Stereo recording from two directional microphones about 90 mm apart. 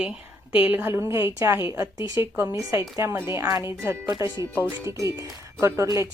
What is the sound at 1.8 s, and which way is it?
Speech, 40° right (ahead or behind).